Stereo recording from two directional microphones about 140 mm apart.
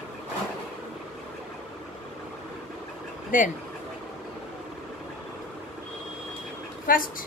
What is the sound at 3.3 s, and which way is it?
Speech, 65° left (ahead or behind).